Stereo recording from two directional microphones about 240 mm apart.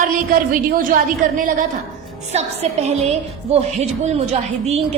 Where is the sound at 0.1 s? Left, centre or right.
Right.